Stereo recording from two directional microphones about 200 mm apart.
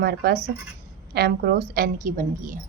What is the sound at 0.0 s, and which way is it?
A woman's voice, 55° right (ahead or behind).